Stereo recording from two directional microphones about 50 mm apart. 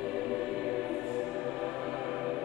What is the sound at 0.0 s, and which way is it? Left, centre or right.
Choir, centre.